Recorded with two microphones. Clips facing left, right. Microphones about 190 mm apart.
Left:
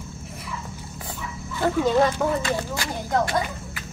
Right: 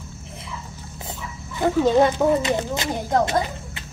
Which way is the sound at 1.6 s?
20° right (ahead or behind).